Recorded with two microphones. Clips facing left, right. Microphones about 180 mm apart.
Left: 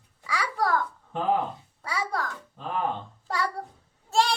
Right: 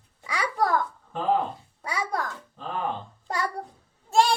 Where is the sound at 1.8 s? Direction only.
15° right (ahead or behind).